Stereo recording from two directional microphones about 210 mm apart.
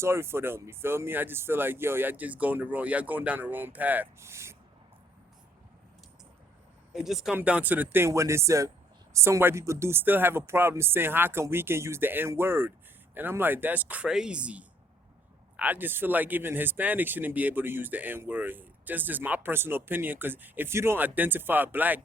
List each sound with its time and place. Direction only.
0.0 s speech: 10° right (ahead or behind)
6.9 s speech: centre (ahead or behind)